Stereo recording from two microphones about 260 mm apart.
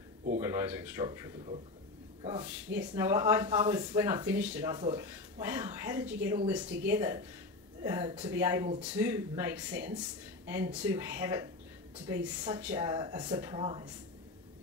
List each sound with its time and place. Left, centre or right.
0.4 s speech: centre
4.7 s speech: centre